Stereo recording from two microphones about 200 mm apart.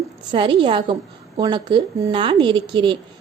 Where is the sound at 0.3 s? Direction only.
25° right (ahead or behind).